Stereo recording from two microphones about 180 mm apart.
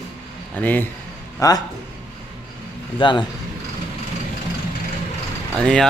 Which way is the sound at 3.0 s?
25° left (ahead or behind).